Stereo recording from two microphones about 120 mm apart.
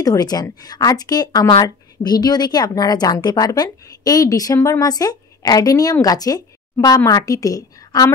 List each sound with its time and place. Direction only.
0.0 s a woman's voice: 30° left (ahead or behind)